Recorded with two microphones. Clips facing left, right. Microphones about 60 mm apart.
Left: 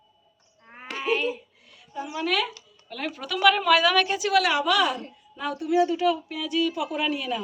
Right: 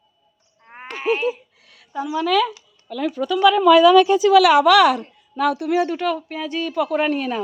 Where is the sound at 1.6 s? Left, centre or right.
Right.